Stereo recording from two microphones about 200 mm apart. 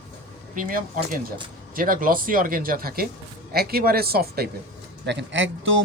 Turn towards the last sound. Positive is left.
turn(degrees=-70)  # may be behind; listen again after turning